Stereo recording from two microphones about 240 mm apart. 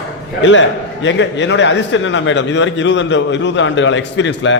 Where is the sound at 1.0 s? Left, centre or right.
Left.